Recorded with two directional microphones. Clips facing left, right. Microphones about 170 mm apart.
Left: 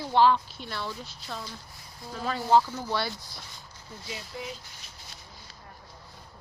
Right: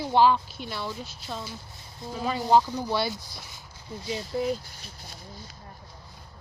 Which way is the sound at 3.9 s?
25° right (ahead or behind).